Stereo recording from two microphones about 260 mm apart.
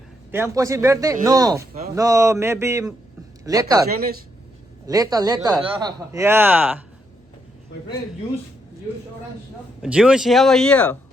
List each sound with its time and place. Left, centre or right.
0.3 s speech: centre
3.8 s speech: right
4.9 s speech: centre
9.8 s speech: centre